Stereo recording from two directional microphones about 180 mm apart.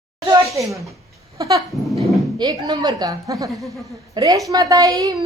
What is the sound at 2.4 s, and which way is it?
Speech, 25° right (ahead or behind).